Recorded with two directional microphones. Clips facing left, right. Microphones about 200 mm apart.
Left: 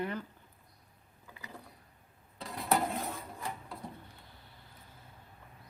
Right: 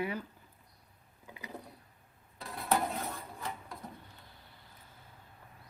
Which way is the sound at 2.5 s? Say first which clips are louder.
Left 1 dB; centre (ahead or behind).